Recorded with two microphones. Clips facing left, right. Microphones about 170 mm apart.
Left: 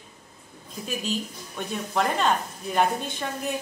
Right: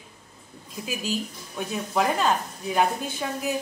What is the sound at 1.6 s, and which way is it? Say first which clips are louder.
Speech: right 1 dB; 5° right (ahead or behind).